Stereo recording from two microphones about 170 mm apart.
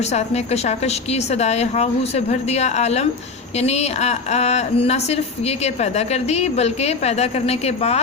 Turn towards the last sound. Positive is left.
turn(degrees=40)  # may be behind; listen again after turning